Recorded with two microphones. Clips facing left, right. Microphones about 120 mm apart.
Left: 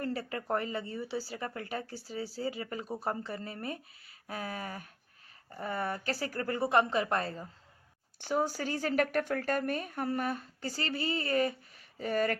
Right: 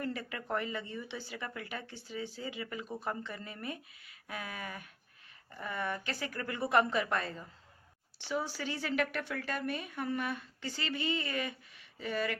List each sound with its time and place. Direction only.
0.0 s a woman's voice: 35° left (ahead or behind)